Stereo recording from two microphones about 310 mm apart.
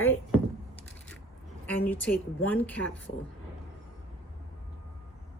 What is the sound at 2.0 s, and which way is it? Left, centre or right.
Speech, centre.